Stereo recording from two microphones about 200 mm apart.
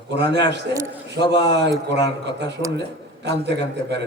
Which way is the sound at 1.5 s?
60° right (ahead or behind).